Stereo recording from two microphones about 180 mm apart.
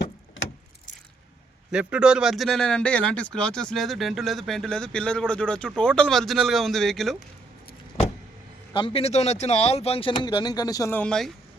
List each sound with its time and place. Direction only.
1.7 s speech: 5° right (ahead or behind)
8.7 s speech: 30° left (ahead or behind); by 11.3 s 5° left (ahead or behind)